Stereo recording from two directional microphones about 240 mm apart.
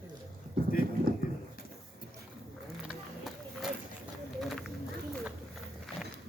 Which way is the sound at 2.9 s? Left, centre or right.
Centre.